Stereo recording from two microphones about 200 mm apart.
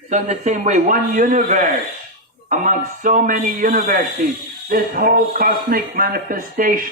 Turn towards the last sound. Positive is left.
turn(degrees=-45)  # may be behind; listen again after turning